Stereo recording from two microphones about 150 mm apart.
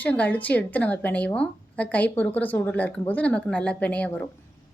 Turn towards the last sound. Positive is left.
turn(degrees=10)  # may be behind; listen again after turning